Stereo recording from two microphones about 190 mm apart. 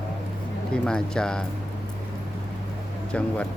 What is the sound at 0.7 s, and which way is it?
Speech, 5° left (ahead or behind).